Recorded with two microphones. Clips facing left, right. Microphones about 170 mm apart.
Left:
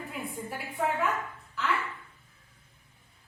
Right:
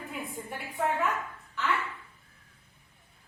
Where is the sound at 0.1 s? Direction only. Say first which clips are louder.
Even; centre (ahead or behind).